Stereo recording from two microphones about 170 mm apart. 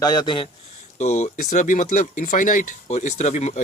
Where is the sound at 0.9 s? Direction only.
40° left (ahead or behind).